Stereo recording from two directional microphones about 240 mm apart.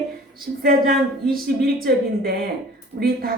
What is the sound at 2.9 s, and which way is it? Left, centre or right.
Speech, right.